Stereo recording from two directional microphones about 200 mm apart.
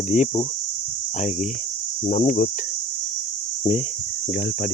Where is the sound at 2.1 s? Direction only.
40° left (ahead or behind).